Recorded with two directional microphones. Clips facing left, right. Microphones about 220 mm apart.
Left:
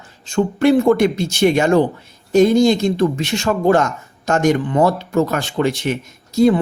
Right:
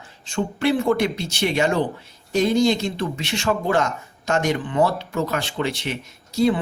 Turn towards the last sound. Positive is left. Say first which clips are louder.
# left 6 dB
turn(degrees=45)  # may be behind; listen again after turning